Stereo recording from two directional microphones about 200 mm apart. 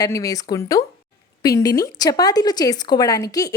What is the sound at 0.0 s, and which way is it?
A woman's voice, 15° left (ahead or behind).